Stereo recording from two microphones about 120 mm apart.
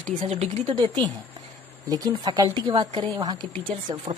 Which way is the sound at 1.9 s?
30° right (ahead or behind).